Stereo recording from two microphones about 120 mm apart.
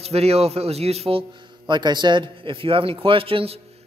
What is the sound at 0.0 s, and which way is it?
Speech, 60° right (ahead or behind).